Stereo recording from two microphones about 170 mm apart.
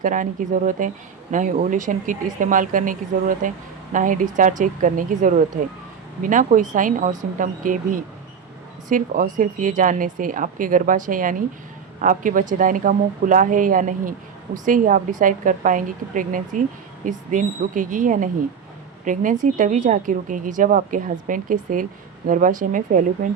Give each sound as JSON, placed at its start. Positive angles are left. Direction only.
{"t": 0.0, "sound": "a woman's voice", "side_deg": -50}